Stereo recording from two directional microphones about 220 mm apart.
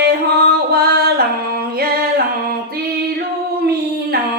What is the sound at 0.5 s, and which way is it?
Music, 45° right (ahead or behind).